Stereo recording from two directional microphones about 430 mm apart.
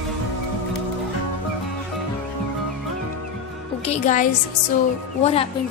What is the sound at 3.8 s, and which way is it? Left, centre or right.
A woman's voice, centre.